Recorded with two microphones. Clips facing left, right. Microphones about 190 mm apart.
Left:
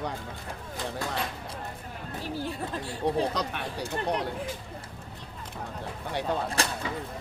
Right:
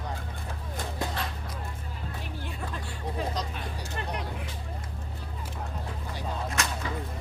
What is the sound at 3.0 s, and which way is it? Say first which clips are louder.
Vehicle: left 6 dB; 70° left (ahead or behind).